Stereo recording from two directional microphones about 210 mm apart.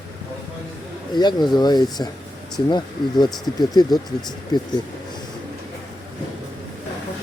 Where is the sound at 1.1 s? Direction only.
20° left (ahead or behind).